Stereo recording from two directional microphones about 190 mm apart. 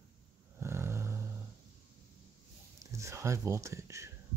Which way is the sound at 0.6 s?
15° right (ahead or behind).